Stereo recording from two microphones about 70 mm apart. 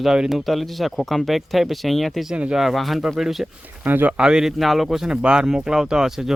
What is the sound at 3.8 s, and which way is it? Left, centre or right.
Speech, right.